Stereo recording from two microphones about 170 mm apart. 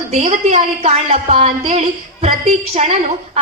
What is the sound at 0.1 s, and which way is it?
A woman's voice, 40° right (ahead or behind).